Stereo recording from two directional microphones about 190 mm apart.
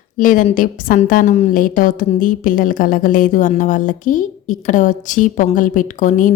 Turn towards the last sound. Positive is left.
turn(degrees=40)  # may be behind; listen again after turning